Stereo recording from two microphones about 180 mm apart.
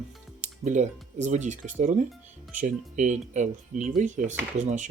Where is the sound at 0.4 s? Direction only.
45° right (ahead or behind).